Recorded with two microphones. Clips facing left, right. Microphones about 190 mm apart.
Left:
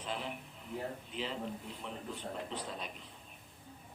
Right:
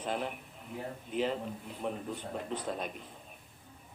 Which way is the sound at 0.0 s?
50° right (ahead or behind).